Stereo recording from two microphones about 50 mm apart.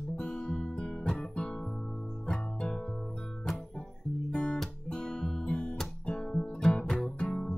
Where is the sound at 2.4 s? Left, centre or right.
Left.